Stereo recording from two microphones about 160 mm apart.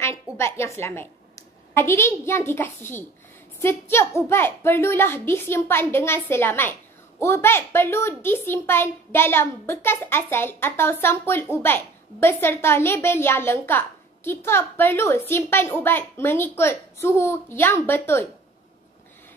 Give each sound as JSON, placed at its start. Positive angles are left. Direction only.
{"t": 0.0, "sound": "a woman's voice", "side_deg": 15}